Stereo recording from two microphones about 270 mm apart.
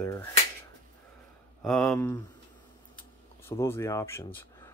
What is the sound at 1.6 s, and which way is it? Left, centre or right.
Speech, centre.